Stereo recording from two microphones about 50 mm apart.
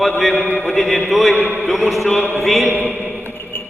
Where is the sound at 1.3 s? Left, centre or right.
Right.